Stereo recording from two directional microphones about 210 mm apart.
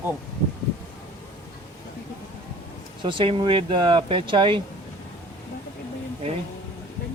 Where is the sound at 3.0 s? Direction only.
25° right (ahead or behind).